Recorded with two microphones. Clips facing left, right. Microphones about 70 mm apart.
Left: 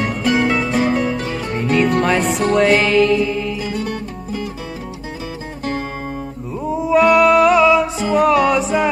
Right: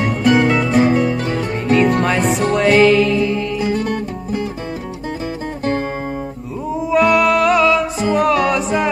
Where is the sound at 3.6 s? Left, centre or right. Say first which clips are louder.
Right 5 dB; right.